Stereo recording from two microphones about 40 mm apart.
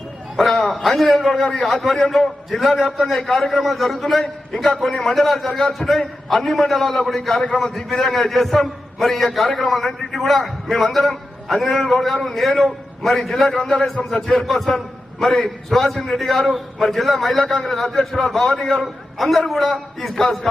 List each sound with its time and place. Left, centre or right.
0.6 s a man's voice: centre